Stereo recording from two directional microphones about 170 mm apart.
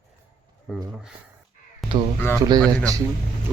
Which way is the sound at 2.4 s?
25° right (ahead or behind).